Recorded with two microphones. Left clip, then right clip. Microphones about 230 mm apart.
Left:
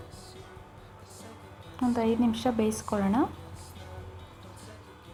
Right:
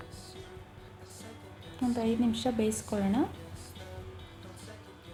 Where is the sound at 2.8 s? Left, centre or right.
Centre.